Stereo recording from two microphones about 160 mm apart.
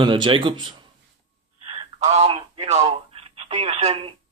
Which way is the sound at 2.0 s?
40° right (ahead or behind).